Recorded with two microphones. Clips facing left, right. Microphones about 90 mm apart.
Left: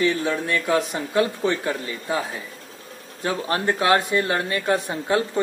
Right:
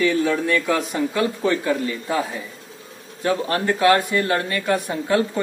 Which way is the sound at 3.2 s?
25° left (ahead or behind).